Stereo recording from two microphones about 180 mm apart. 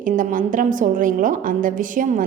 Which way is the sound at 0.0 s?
50° right (ahead or behind).